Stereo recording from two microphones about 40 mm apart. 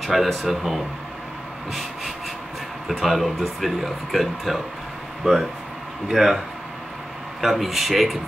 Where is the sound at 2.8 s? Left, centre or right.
Centre.